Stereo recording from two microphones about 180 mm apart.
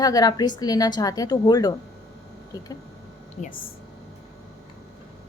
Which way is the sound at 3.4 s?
40° left (ahead or behind).